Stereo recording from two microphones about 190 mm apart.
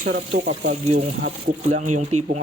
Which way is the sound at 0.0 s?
40° right (ahead or behind).